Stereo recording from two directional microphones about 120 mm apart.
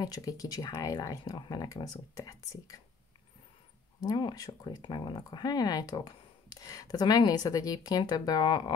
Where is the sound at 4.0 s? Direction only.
35° left (ahead or behind).